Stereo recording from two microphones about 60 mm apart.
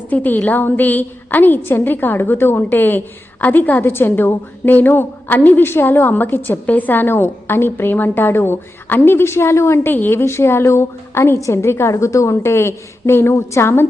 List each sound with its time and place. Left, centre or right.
0.1 s a woman's voice: left
3.8 s a woman's voice: left
9.9 s a woman's voice: left